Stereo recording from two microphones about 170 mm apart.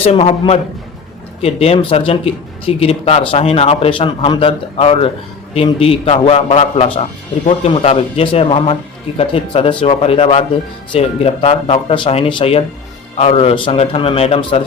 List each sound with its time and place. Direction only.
0.0 s speech: 35° left (ahead or behind)